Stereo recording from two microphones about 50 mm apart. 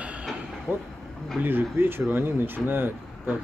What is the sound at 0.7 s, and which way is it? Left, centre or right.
Speech, right.